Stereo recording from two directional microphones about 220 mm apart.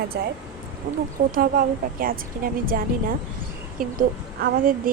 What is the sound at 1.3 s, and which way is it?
Speech, 40° right (ahead or behind).